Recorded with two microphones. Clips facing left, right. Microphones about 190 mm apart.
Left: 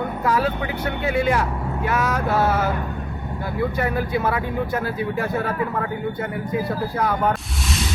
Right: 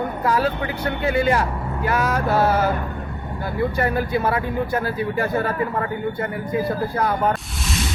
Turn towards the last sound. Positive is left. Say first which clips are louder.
# right 1 dB
turn(degrees=0)  # may be behind; listen again after turning